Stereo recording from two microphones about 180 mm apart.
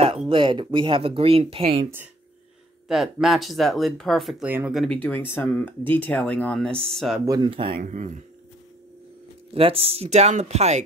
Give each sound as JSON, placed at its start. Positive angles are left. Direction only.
{"t": 0.3, "sound": "speech", "side_deg": -25}
{"t": 2.9, "sound": "speech", "side_deg": 0}
{"t": 7.2, "sound": "speech", "side_deg": -20}
{"t": 7.7, "sound": "speech", "side_deg": -45}
{"t": 9.5, "sound": "speech", "side_deg": -30}